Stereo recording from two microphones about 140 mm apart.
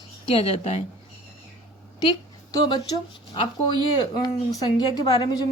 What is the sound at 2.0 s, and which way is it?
Speech, 30° left (ahead or behind).